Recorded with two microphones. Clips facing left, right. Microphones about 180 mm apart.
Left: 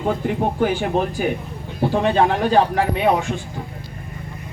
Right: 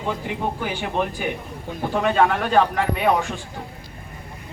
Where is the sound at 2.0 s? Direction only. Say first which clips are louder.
Left 1 dB; 30° left (ahead or behind).